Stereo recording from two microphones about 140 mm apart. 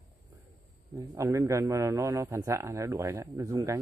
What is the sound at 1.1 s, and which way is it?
A man's voice, 20° right (ahead or behind).